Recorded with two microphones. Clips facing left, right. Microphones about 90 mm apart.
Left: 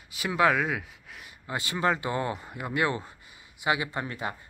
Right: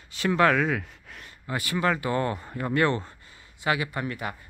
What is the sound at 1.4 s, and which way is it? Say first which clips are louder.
Speech: right 1 dB; 25° left (ahead or behind).